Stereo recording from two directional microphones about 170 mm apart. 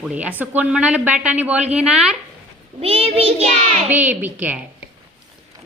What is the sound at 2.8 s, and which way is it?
Child singing, 35° right (ahead or behind).